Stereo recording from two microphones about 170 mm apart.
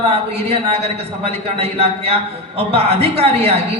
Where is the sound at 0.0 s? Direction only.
35° right (ahead or behind).